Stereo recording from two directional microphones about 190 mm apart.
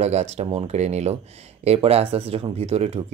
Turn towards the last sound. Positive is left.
turn(degrees=-35)  # may be behind; listen again after turning